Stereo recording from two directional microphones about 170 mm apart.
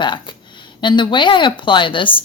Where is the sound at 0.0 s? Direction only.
25° left (ahead or behind).